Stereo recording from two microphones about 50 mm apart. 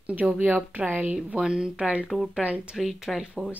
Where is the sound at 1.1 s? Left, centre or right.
Centre.